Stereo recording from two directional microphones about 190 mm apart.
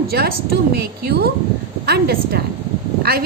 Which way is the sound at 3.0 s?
55° right (ahead or behind).